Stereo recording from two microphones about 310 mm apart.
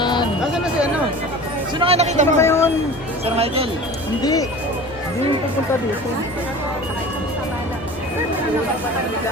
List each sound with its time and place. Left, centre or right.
0.0 s music: centre
1.8 s speech: centre
2.4 s a sound: centre
3.2 s speech: centre
4.2 s speech: centre